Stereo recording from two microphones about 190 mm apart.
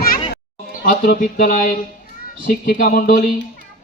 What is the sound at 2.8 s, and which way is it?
Speech, 55° left (ahead or behind).